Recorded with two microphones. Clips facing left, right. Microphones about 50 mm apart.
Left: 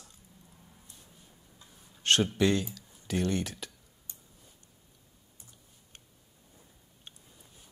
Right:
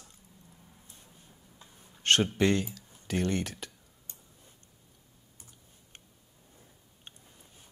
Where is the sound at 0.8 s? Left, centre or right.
Right.